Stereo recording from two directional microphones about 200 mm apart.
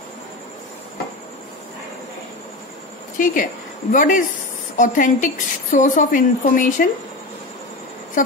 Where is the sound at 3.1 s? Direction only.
40° left (ahead or behind).